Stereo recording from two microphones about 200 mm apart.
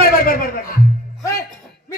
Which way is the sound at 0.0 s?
45° left (ahead or behind).